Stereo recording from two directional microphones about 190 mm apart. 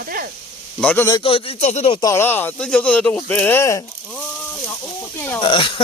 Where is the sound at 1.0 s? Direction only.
25° left (ahead or behind).